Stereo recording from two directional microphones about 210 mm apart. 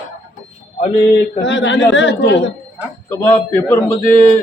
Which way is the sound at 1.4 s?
60° left (ahead or behind).